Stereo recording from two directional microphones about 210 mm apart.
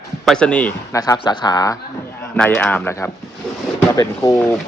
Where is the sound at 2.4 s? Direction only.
5° left (ahead or behind).